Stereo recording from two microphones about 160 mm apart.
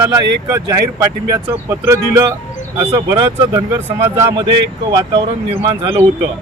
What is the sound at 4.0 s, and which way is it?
Speech, 15° right (ahead or behind).